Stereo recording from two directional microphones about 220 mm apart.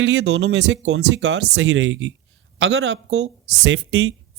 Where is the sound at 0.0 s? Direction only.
55° right (ahead or behind).